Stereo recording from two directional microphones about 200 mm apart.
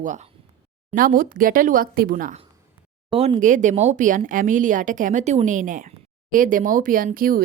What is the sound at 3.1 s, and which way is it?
Speech, 30° right (ahead or behind).